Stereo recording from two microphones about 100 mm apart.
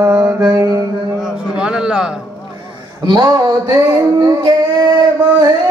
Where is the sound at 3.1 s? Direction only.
45° right (ahead or behind).